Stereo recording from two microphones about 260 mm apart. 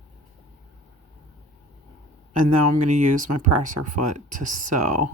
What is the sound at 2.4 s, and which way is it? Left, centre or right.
Speech, right.